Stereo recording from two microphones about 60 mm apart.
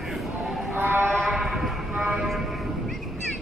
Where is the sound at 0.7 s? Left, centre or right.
Right.